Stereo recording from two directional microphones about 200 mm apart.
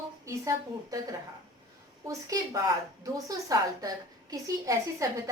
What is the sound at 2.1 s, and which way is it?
A woman's voice, 15° right (ahead or behind).